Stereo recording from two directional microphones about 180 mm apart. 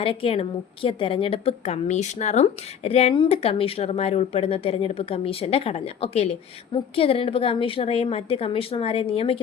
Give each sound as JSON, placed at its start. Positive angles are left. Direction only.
{"t": 0.0, "sound": "a woman's voice", "side_deg": 30}